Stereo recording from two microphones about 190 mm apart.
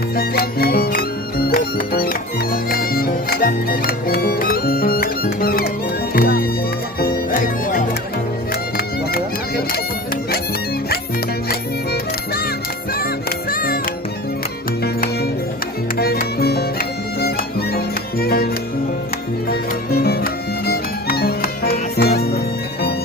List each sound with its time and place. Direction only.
0.2 s music: 50° left (ahead or behind)
9.1 s music: 55° left (ahead or behind)
11.4 s music: 55° left (ahead or behind)
16.0 s music: 55° left (ahead or behind)